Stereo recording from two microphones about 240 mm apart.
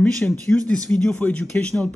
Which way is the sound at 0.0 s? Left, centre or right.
Centre.